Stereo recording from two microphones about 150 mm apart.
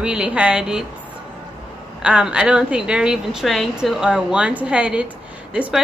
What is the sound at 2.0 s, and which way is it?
A woman's voice, 5° right (ahead or behind).